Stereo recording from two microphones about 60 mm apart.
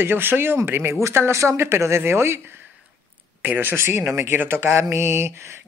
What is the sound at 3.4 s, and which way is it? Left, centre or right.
A woman's voice, right.